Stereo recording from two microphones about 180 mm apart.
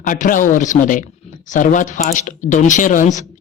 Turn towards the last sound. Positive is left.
turn(degrees=45)  # may be behind; listen again after turning